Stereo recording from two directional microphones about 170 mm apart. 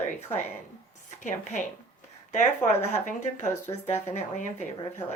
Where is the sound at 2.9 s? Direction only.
45° left (ahead or behind).